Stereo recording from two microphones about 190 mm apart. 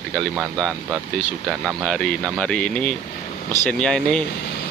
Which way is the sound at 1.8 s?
5° left (ahead or behind).